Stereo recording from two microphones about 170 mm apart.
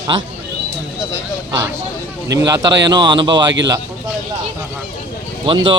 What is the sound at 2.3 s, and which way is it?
Speech, 20° right (ahead or behind).